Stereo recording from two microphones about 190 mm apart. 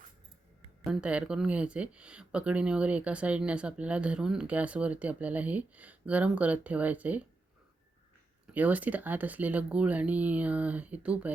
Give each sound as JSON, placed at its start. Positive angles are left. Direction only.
{"t": 0.9, "sound": "speech", "side_deg": -5}
{"t": 8.5, "sound": "speech", "side_deg": -10}